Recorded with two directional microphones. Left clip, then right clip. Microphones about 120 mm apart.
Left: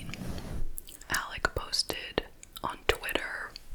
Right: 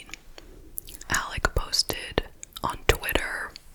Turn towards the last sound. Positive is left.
turn(degrees=-25)  # may be behind; listen again after turning